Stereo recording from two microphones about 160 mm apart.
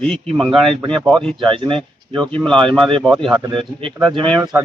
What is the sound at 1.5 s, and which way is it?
Speech, 35° right (ahead or behind).